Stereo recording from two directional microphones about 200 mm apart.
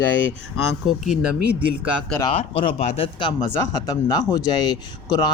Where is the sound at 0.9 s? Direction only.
5° right (ahead or behind).